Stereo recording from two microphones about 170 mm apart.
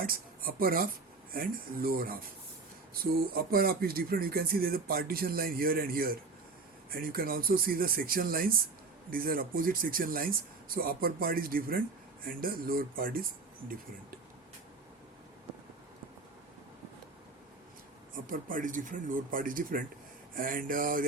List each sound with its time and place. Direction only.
0.0 s speech: 60° right (ahead or behind)
18.1 s speech: 50° right (ahead or behind)